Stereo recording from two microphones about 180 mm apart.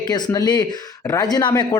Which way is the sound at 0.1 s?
20° left (ahead or behind).